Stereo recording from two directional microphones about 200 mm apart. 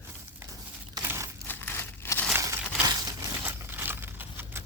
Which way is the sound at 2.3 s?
15° right (ahead or behind).